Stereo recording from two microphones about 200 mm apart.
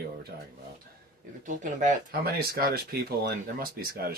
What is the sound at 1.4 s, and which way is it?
Speech, 40° right (ahead or behind).